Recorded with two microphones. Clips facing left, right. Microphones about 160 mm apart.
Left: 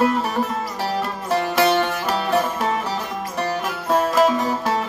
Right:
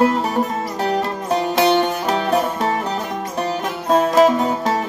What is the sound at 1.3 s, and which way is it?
Music, 20° right (ahead or behind).